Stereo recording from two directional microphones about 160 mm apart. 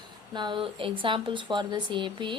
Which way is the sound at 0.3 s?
30° right (ahead or behind).